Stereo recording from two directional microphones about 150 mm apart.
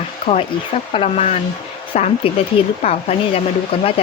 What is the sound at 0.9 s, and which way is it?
Speech, 45° left (ahead or behind).